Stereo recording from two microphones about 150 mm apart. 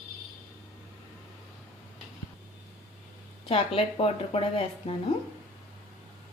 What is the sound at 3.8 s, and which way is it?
Speech, 40° left (ahead or behind).